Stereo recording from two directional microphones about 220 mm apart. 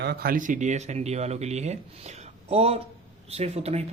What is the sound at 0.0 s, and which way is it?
A man's voice, 45° right (ahead or behind).